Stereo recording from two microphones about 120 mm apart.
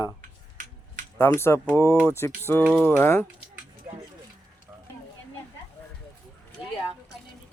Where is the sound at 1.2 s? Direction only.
20° left (ahead or behind).